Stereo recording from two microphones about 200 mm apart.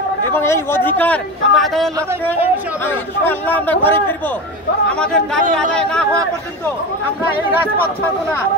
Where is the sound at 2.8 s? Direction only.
10° left (ahead or behind).